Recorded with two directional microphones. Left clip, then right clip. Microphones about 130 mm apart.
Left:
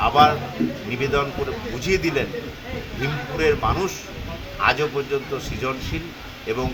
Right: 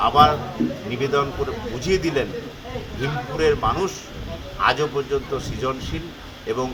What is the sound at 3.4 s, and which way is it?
A man's voice, 10° right (ahead or behind).